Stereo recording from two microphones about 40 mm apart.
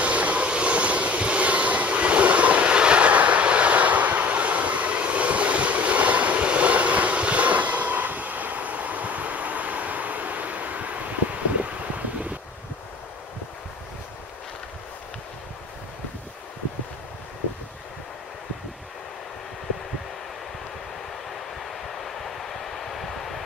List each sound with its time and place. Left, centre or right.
0.0 s vehicle: right
22.0 s vehicle: centre